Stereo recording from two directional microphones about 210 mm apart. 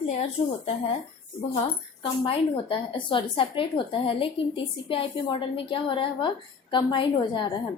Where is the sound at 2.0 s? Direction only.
25° left (ahead or behind).